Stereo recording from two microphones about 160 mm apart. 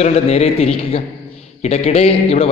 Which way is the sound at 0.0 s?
40° left (ahead or behind).